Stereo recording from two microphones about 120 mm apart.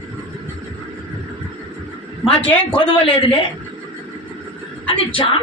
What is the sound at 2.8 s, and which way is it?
Speech, 50° left (ahead or behind).